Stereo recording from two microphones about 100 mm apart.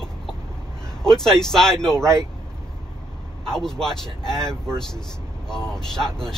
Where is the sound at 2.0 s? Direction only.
30° right (ahead or behind).